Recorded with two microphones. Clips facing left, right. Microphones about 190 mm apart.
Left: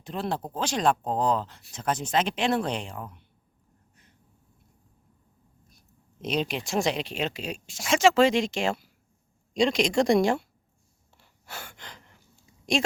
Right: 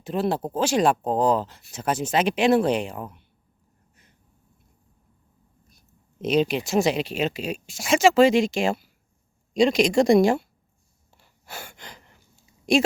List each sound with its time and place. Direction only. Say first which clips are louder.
0.0 s speech: right 6 dB; 5° right (ahead or behind)
6.2 s speech: right 7 dB; 5° right (ahead or behind)
11.2 s gasp: right 2 dB; 10° right (ahead or behind)
12.7 s a woman's voice: right 6 dB; 5° right (ahead or behind)